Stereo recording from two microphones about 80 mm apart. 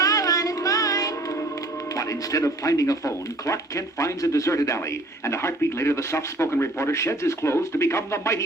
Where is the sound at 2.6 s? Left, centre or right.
Left.